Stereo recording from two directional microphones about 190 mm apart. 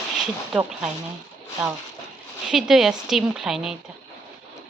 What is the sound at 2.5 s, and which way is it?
Speech, centre (ahead or behind).